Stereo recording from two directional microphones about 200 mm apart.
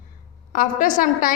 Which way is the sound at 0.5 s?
45° left (ahead or behind).